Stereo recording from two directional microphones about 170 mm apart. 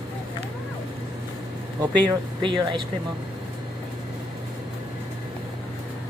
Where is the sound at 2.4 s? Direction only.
30° right (ahead or behind).